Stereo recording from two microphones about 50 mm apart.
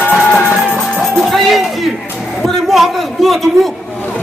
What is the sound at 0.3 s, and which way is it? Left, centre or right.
Music, left.